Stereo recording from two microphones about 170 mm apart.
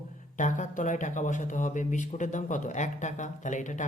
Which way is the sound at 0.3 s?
50° left (ahead or behind).